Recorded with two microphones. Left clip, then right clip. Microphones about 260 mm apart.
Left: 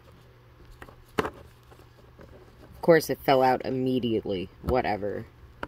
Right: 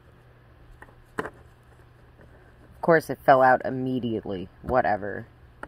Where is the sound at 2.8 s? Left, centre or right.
Left.